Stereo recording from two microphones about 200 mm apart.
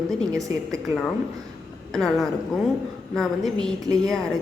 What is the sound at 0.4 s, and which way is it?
Speech, 15° right (ahead or behind).